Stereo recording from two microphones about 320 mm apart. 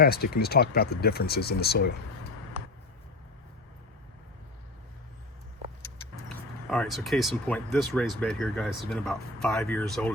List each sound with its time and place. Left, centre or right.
0.0 s speech: left
6.2 s speech: centre